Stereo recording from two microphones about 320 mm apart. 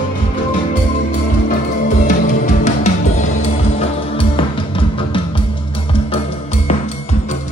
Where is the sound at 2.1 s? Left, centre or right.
Left.